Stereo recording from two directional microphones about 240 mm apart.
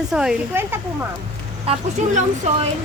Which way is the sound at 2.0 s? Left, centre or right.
Right.